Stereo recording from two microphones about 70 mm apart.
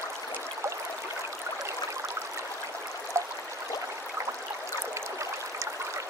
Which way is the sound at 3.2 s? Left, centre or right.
Right.